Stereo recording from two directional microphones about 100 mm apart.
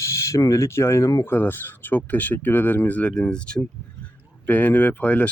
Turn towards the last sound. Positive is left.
turn(degrees=15)  # may be behind; listen again after turning